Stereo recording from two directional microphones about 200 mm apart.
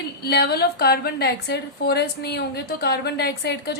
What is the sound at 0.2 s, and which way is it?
A woman's voice, 55° left (ahead or behind).